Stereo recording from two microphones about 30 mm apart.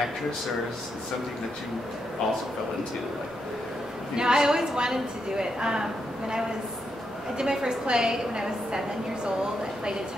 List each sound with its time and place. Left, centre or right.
4.2 s a woman's voice: right